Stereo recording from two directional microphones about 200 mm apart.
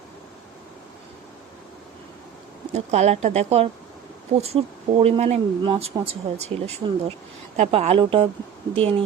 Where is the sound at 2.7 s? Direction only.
35° right (ahead or behind).